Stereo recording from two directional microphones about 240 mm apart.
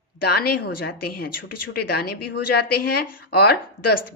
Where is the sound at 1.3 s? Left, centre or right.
Left.